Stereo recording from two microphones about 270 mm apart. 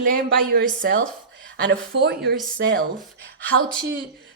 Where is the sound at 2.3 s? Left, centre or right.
Centre.